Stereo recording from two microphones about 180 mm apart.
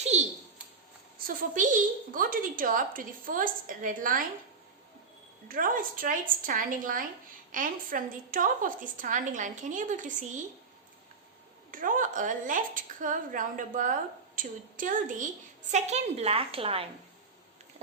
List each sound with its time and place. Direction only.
0.1 s a sound: 40° right (ahead or behind)
1.2 s a woman's voice: 50° right (ahead or behind)
5.5 s a woman's voice: 50° right (ahead or behind)
11.7 s a woman's voice: 50° right (ahead or behind); by 16.9 s 30° right (ahead or behind)